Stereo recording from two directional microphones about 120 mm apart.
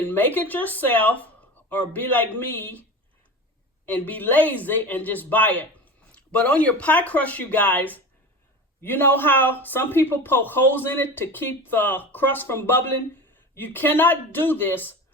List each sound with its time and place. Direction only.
0.0 s a man's voice: 15° left (ahead or behind)
3.8 s a man's voice: 15° left (ahead or behind)